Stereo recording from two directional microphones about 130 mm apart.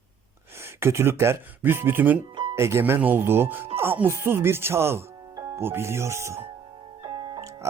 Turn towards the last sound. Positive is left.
turn(degrees=-25)  # may be behind; listen again after turning